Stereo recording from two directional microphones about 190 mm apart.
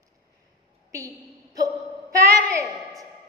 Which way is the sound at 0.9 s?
20° right (ahead or behind).